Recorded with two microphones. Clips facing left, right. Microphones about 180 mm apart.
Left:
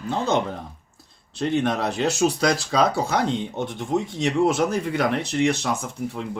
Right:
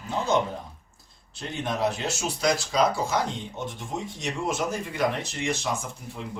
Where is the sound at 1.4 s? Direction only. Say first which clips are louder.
Left 6 dB; 65° left (ahead or behind).